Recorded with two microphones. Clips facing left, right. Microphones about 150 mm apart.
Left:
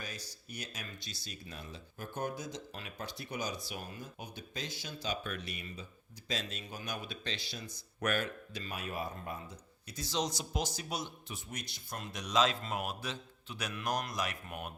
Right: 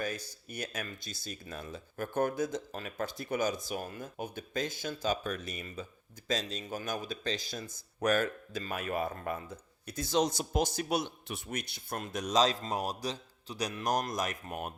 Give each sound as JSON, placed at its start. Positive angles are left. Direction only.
{"t": 0.0, "sound": "speech", "side_deg": -50}